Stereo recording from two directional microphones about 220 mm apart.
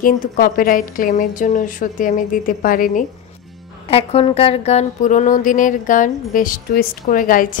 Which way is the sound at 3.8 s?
25° left (ahead or behind).